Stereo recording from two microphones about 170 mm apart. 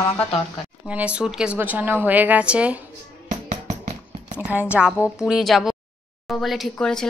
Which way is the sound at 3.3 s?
45° right (ahead or behind).